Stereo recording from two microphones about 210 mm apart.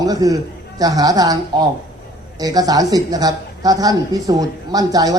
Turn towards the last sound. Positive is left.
turn(degrees=-15)  # may be behind; listen again after turning